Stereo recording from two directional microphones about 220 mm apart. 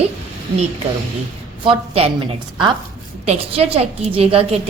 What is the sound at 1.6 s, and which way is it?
A woman's voice, 25° right (ahead or behind).